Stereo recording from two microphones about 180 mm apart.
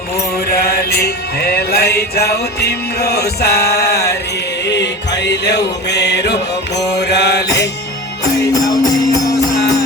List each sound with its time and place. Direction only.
0.5 s music: 60° left (ahead or behind)
6.7 s mantra: 70° left (ahead or behind)
8.5 s music: 20° left (ahead or behind)